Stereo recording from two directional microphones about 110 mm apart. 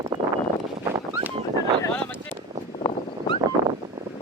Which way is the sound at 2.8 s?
50° left (ahead or behind).